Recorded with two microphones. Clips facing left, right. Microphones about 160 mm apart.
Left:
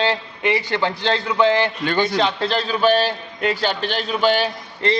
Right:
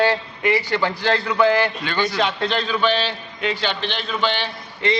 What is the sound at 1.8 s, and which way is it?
Speech, 50° left (ahead or behind).